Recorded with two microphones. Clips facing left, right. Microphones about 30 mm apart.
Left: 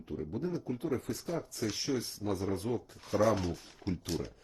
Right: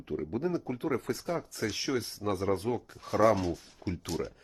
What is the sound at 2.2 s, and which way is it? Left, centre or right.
Speech, right.